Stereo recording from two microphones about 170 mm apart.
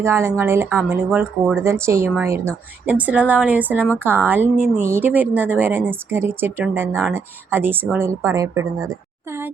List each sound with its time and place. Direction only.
0.0 s a woman's voice: 15° right (ahead or behind)